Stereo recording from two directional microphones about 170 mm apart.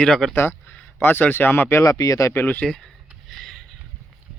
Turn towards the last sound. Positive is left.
turn(degrees=0)  # may be behind; listen again after turning